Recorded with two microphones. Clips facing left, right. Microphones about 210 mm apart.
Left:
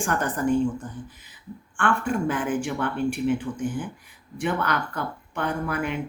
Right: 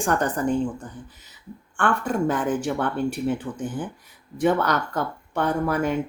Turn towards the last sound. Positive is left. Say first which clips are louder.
# right 4 dB
turn(degrees=-40)  # may be behind; listen again after turning